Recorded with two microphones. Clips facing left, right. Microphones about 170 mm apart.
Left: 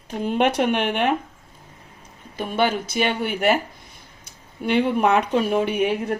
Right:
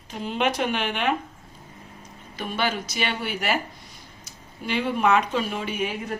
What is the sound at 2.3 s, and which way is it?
Speech, 50° left (ahead or behind).